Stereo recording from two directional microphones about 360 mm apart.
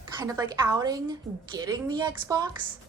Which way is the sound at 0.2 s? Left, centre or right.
Centre.